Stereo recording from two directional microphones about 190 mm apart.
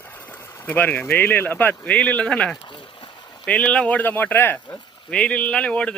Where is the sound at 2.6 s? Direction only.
25° left (ahead or behind).